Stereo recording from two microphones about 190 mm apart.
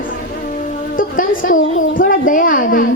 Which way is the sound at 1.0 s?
45° left (ahead or behind).